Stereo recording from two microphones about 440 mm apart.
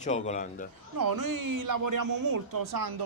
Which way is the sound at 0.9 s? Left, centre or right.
Right.